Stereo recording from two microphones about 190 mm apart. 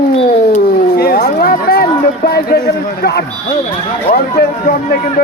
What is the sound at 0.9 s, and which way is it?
A man's voice, 55° left (ahead or behind).